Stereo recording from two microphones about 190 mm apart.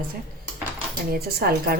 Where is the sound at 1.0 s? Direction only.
55° right (ahead or behind).